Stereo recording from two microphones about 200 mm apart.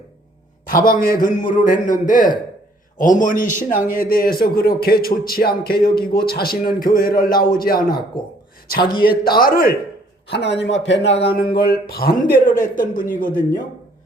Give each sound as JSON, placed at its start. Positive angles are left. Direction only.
{"t": 0.7, "sound": "a man's voice", "side_deg": 45}
{"t": 9.0, "sound": "a man's voice", "side_deg": 50}
{"t": 10.8, "sound": "speech", "side_deg": 65}
{"t": 11.1, "sound": "a sound", "side_deg": 30}
{"t": 11.6, "sound": "a man's voice", "side_deg": 50}